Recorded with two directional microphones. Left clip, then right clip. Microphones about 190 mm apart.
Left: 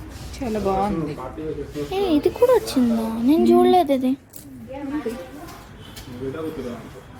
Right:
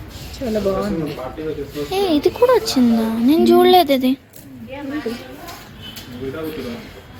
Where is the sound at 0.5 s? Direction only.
35° left (ahead or behind).